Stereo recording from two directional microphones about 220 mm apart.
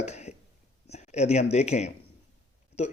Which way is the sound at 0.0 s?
30° left (ahead or behind).